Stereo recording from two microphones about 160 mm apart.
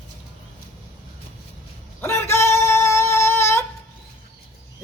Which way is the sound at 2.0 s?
15° left (ahead or behind).